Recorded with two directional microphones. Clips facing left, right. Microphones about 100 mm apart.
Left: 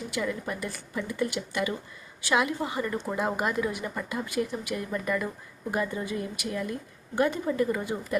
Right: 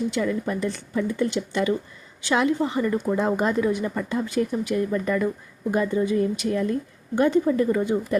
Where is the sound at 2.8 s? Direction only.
10° right (ahead or behind).